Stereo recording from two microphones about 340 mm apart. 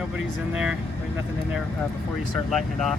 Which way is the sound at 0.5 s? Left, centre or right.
Centre.